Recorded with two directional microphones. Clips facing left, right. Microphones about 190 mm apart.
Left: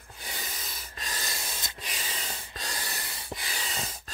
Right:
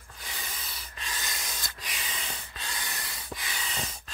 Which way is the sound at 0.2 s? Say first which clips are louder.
Left 2 dB; 35° left (ahead or behind).